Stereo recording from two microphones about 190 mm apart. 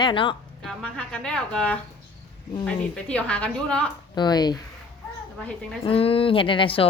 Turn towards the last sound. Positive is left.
turn(degrees=30)  # may be behind; listen again after turning